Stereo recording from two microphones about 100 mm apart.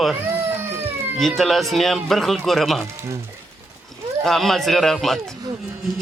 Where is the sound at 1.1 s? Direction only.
Centre (ahead or behind).